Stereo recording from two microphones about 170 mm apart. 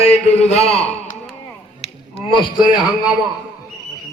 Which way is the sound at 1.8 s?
35° left (ahead or behind).